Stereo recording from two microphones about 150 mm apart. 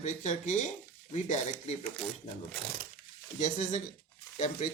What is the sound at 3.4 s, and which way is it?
Speech, 55° left (ahead or behind).